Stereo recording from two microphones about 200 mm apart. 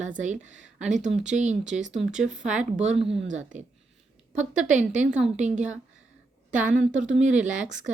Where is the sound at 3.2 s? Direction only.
70° right (ahead or behind).